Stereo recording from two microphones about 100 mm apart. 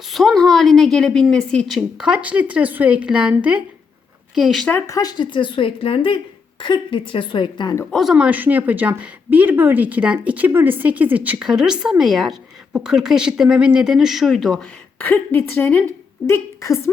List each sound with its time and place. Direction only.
0.1 s a woman's voice: centre (ahead or behind)
1.7 s a woman's voice: 10° right (ahead or behind)
4.9 s a woman's voice: 40° left (ahead or behind)
7.9 s a woman's voice: 5° left (ahead or behind)
8.1 s speech: 15° right (ahead or behind)
14.9 s a woman's voice: 20° left (ahead or behind)